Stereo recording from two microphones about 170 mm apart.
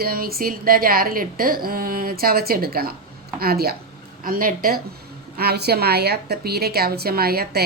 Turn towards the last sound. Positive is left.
turn(degrees=-65)  # may be behind; listen again after turning